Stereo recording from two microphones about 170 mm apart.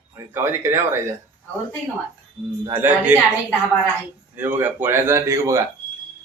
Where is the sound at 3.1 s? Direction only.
10° right (ahead or behind).